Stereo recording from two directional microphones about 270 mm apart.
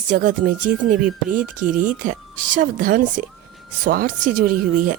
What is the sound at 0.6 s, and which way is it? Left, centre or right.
Speech, right.